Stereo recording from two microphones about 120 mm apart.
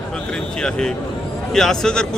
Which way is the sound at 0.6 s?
5° left (ahead or behind).